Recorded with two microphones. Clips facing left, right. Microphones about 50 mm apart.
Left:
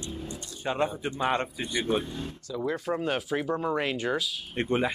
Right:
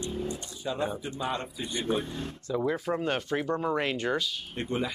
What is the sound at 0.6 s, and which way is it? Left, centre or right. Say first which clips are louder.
Speech: left 3 dB; left.